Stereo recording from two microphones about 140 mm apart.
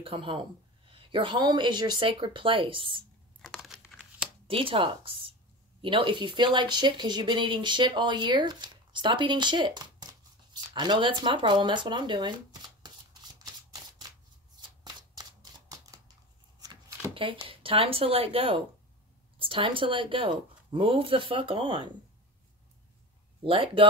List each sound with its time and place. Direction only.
0.0 s speech: 40° right (ahead or behind)
3.4 s a sound: centre (ahead or behind)
4.5 s speech: 40° right (ahead or behind)
14.8 s shuffling cards: 30° right (ahead or behind)
15.7 s scissors: 25° right (ahead or behind)
16.5 s a sound: 25° right (ahead or behind)
17.1 s speech: 40° right (ahead or behind)
23.4 s speech: 40° right (ahead or behind)